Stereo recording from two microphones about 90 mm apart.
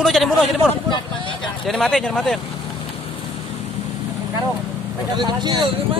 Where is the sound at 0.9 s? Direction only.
65° left (ahead or behind).